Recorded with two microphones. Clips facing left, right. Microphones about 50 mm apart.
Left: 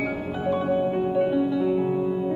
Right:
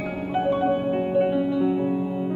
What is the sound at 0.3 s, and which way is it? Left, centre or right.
Music, right.